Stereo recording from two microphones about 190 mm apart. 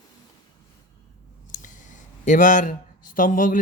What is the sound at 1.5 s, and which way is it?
Speech, 40° left (ahead or behind).